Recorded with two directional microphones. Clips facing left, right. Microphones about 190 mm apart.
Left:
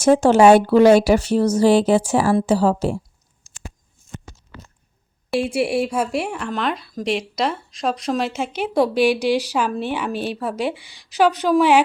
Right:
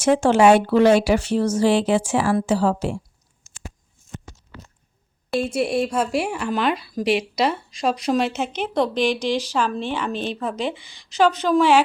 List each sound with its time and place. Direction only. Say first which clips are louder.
0.0 s speech: left 3 dB; 40° left (ahead or behind)
5.3 s speech: left 2 dB; 10° left (ahead or behind)